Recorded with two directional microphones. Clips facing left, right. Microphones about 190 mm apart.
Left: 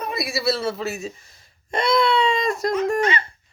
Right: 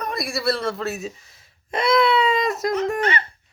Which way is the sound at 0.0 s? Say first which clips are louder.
Even; 5° left (ahead or behind).